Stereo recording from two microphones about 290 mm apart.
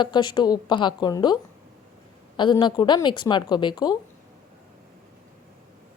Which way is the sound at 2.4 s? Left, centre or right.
Centre.